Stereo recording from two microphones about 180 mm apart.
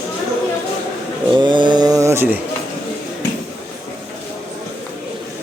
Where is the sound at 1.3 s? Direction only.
25° right (ahead or behind).